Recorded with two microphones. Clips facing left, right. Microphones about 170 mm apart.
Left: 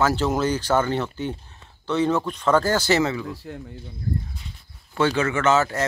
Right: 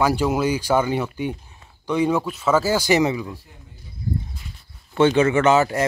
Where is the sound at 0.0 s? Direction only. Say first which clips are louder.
Right 2 dB; 10° right (ahead or behind).